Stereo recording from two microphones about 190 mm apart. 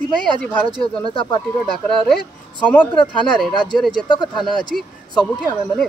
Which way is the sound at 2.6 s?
10° left (ahead or behind).